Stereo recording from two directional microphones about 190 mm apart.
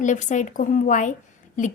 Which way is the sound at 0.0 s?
40° left (ahead or behind).